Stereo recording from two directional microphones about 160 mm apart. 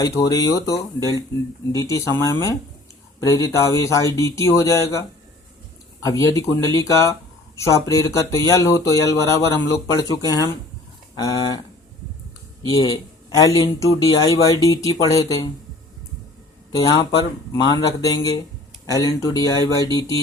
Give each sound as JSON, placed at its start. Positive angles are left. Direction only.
{"t": 0.0, "sound": "speech", "side_deg": 20}
{"t": 6.1, "sound": "speech", "side_deg": 20}
{"t": 12.6, "sound": "speech", "side_deg": 20}
{"t": 16.7, "sound": "speech", "side_deg": 25}